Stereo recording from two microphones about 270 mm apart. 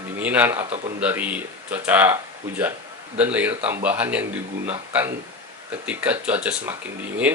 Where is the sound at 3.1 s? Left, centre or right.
Centre.